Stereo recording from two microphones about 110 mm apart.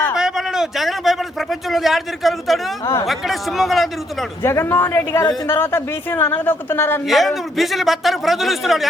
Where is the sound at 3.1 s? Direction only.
Centre (ahead or behind).